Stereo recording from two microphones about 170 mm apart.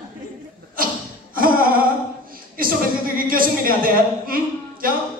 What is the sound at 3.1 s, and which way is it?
A woman's voice, 55° right (ahead or behind).